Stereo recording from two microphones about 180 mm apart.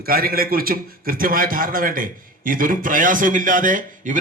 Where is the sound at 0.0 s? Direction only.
55° right (ahead or behind).